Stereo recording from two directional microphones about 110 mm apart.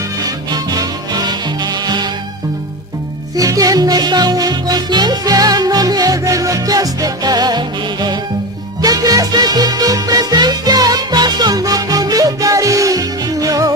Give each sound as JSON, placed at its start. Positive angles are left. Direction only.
{"t": 0.2, "sound": "music", "side_deg": -35}
{"t": 3.3, "sound": "music", "side_deg": -30}
{"t": 8.8, "sound": "music", "side_deg": -35}